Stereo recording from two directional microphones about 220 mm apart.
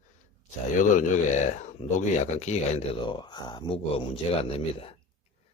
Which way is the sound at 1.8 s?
30° left (ahead or behind).